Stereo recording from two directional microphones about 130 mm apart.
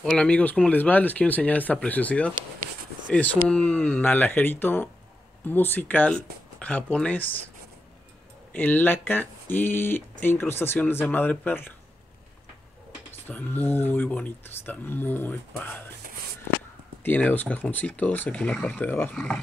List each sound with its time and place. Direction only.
0.0 s speech: 10° left (ahead or behind)
8.5 s speech: 15° left (ahead or behind)
13.1 s speech: 15° left (ahead or behind)
17.0 s speech: 15° left (ahead or behind)